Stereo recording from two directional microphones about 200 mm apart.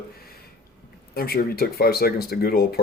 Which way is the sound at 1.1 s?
50° left (ahead or behind).